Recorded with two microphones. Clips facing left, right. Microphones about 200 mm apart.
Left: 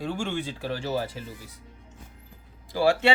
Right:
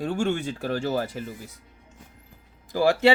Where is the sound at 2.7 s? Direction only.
45° right (ahead or behind).